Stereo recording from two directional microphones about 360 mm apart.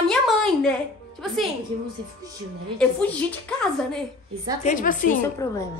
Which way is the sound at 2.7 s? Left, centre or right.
Centre.